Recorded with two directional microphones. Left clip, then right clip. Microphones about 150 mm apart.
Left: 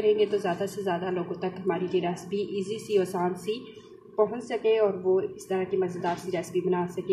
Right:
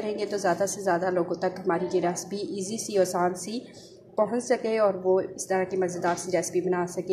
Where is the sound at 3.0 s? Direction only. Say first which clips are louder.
Right 4 dB; 30° right (ahead or behind).